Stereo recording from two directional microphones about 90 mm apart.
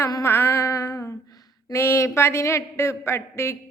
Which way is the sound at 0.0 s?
35° left (ahead or behind).